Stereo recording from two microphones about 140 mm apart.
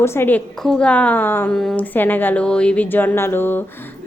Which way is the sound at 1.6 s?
5° left (ahead or behind).